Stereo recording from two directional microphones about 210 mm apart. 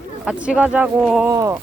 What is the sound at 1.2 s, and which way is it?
Speech, 15° right (ahead or behind).